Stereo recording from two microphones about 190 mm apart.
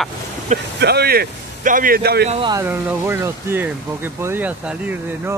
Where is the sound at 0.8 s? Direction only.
60° right (ahead or behind).